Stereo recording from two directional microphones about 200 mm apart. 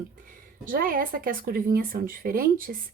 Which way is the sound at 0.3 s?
45° right (ahead or behind).